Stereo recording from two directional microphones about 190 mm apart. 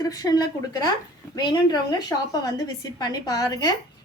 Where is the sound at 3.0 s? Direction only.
20° left (ahead or behind).